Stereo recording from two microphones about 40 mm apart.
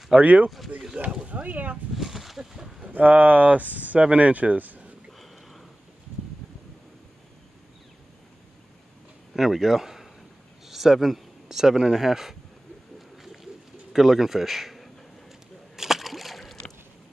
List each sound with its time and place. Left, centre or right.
0.2 s speech: right
2.0 s a sound: centre
2.9 s speech: right
9.3 s speech: centre
13.2 s bird: centre
13.9 s speech: centre
15.7 s splash: centre